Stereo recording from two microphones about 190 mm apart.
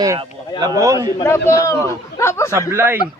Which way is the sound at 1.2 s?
15° left (ahead or behind).